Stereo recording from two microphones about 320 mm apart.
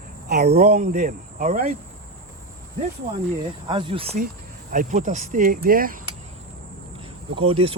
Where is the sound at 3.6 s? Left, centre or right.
Centre.